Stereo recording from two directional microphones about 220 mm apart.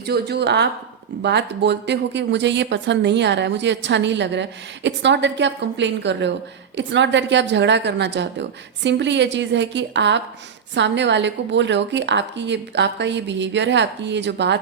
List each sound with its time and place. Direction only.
0.0 s a woman's voice: 45° right (ahead or behind)